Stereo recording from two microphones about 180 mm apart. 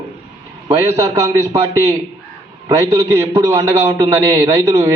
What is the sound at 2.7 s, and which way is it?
A man's voice, 15° right (ahead or behind).